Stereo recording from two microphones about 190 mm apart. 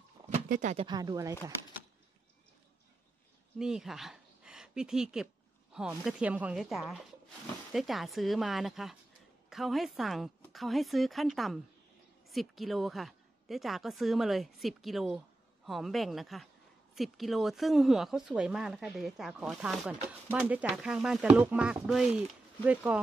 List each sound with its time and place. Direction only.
0.3 s a sound: 40° right (ahead or behind)
0.8 s speech: 20° right (ahead or behind)
3.5 s speech: 5° right (ahead or behind)